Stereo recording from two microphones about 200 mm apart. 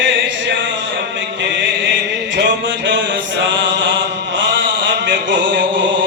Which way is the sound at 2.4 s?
65° right (ahead or behind).